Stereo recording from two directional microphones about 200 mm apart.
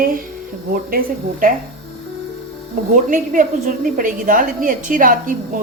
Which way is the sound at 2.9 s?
40° right (ahead or behind).